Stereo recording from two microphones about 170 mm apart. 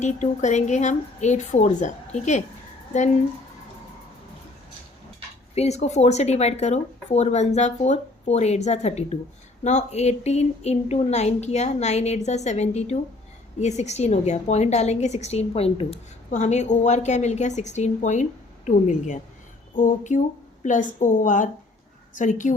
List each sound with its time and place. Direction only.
0.0 s a woman's voice: 45° left (ahead or behind)
5.5 s a woman's voice: 40° left (ahead or behind)